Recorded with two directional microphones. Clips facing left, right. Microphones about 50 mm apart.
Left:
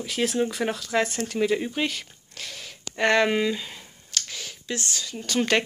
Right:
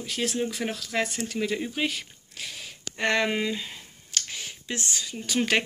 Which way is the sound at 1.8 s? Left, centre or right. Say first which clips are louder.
Even; centre.